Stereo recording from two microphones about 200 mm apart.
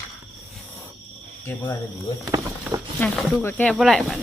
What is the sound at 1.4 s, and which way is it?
Speech, 10° left (ahead or behind).